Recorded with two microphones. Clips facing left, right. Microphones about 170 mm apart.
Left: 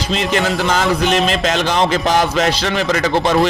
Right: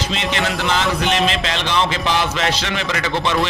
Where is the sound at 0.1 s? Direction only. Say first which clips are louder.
Left 8 dB; 40° left (ahead or behind).